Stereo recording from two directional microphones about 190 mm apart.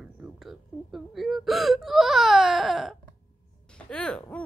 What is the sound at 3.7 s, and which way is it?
Music, 5° left (ahead or behind).